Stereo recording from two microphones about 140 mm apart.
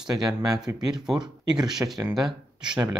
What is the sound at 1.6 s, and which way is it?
Speech, 5° right (ahead or behind).